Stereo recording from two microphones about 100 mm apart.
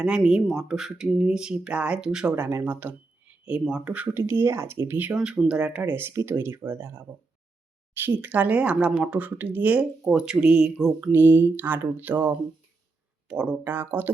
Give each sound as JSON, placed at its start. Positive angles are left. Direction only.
{"t": 0.0, "sound": "speech", "side_deg": -5}
{"t": 2.3, "sound": "speech", "side_deg": -25}
{"t": 5.1, "sound": "speech", "side_deg": -10}
{"t": 11.0, "sound": "speech", "side_deg": -20}